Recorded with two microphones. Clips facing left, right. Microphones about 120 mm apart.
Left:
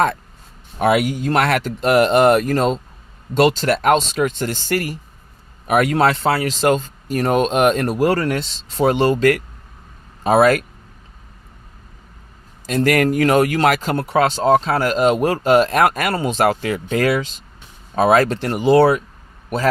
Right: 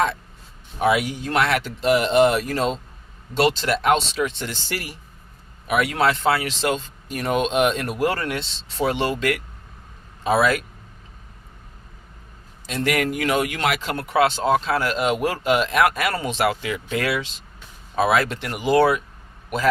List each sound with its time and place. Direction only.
0.8 s speech: 55° left (ahead or behind)
12.6 s speech: 45° left (ahead or behind)